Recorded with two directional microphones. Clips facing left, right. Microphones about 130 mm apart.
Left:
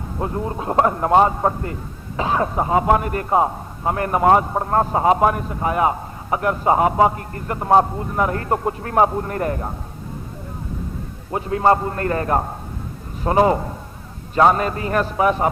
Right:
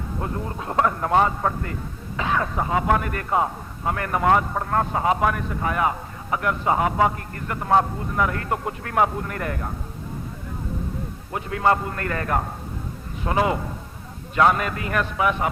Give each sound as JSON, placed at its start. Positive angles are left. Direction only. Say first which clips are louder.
{"t": 0.2, "sound": "a man's voice", "louder": "left 6 dB", "side_deg": 25}
{"t": 11.3, "sound": "a man's voice", "louder": "left 4 dB", "side_deg": 30}